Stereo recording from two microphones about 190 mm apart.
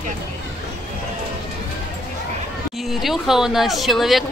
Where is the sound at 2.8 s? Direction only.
Centre (ahead or behind).